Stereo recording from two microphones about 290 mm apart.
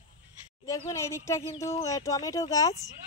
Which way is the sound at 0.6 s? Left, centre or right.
Centre.